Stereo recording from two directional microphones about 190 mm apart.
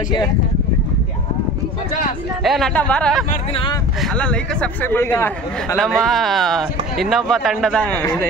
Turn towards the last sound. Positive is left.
turn(degrees=5)  # may be behind; listen again after turning